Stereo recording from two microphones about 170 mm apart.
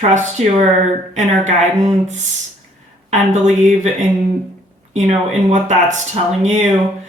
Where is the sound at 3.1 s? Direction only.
45° right (ahead or behind).